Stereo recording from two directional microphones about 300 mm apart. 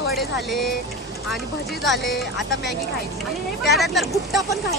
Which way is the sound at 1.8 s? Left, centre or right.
Centre.